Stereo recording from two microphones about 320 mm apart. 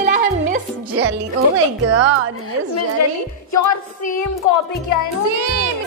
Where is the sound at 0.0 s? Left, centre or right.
Right.